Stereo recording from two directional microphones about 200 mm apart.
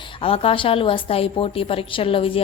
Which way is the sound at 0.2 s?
30° left (ahead or behind).